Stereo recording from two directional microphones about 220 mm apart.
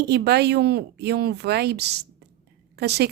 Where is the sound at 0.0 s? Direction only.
50° right (ahead or behind).